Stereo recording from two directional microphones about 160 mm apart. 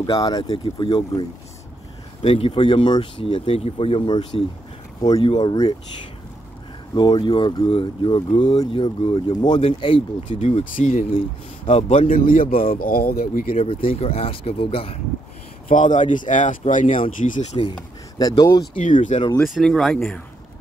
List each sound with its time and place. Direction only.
0.0 s speech: 25° left (ahead or behind)
2.2 s speech: 35° left (ahead or behind)
7.0 s speech: 30° left (ahead or behind)
8.3 s speech: 45° left (ahead or behind)
8.5 s speech: 30° left (ahead or behind); by 11.1 s 50° left (ahead or behind)
11.1 s speech: 35° left (ahead or behind)
12.1 s a man's voice: 60° left (ahead or behind)
13.5 s speech: 35° left (ahead or behind)
15.7 s speech: 50° left (ahead or behind)
18.4 s speech: 25° left (ahead or behind)
18.8 s speech: 50° left (ahead or behind)
19.4 s speech: centre (ahead or behind)